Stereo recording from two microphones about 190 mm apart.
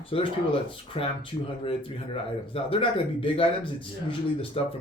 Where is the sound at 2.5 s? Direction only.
30° left (ahead or behind).